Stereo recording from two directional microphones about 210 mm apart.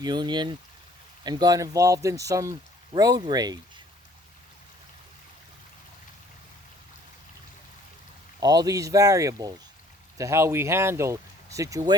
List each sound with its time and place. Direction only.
0.0 s speech: 20° right (ahead or behind)
8.4 s speech: 15° right (ahead or behind)